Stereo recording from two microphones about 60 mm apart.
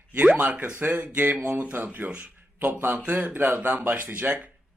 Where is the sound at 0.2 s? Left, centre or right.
Right.